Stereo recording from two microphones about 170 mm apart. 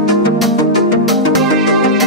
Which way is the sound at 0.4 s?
Centre (ahead or behind).